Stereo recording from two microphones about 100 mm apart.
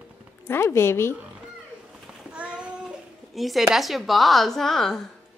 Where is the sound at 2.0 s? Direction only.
10° right (ahead or behind).